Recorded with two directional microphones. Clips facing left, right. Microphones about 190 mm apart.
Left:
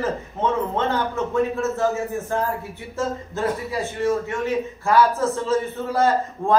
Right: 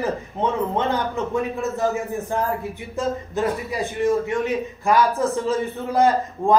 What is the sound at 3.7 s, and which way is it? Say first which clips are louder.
A man's voice: right 3 dB; 15° right (ahead or behind).